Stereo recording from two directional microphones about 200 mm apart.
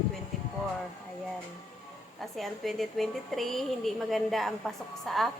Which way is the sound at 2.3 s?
Centre (ahead or behind).